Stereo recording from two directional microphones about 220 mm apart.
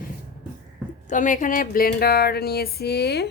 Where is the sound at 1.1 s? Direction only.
35° left (ahead or behind).